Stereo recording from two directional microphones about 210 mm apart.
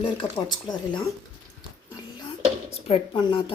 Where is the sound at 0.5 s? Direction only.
20° left (ahead or behind).